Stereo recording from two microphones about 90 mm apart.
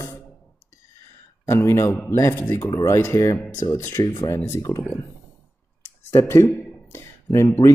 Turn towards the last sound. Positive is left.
turn(degrees=35)  # may be behind; listen again after turning